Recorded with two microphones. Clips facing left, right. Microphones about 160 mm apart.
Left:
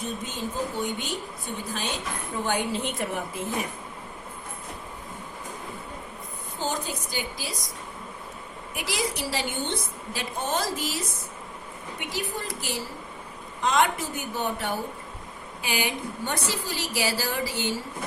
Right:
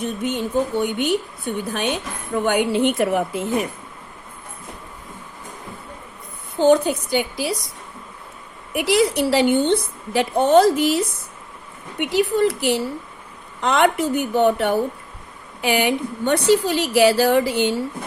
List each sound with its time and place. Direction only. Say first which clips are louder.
0.0 s a woman's voice: right 8 dB; 70° right (ahead or behind)
6.6 s a woman's voice: right 15 dB; 70° right (ahead or behind)
8.7 s a woman's voice: right 13 dB; 65° right (ahead or behind)